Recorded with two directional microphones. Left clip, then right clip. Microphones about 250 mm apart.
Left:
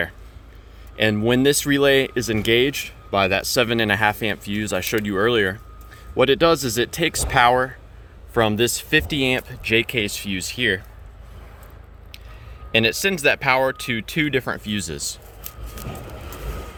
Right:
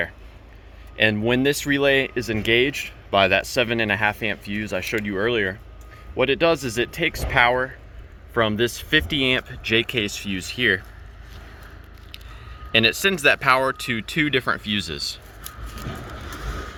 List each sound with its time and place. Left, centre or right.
0.9 s speech: centre
12.7 s speech: centre
15.4 s vehicle: left